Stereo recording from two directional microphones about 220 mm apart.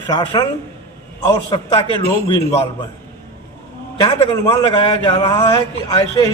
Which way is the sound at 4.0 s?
20° left (ahead or behind).